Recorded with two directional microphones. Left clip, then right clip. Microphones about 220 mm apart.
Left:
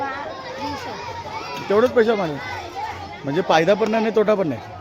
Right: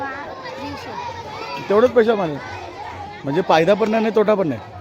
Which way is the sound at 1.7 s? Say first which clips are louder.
Right 2 dB; 10° right (ahead or behind).